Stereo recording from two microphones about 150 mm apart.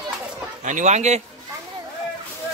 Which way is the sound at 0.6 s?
50° right (ahead or behind).